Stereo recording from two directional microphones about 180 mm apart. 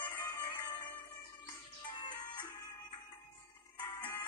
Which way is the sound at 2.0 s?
25° left (ahead or behind).